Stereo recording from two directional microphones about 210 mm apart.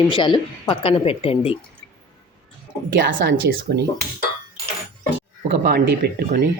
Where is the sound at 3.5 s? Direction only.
45° right (ahead or behind).